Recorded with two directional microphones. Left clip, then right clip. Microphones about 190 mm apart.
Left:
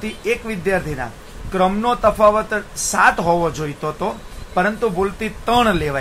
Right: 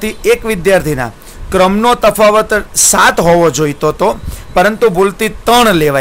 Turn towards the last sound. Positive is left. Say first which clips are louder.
# right 8 dB
turn(degrees=-55)  # may be behind; listen again after turning